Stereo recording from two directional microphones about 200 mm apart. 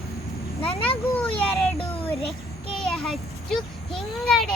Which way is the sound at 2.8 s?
5° left (ahead or behind).